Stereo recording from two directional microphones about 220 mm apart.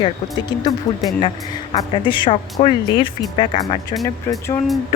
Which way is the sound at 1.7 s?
20° left (ahead or behind).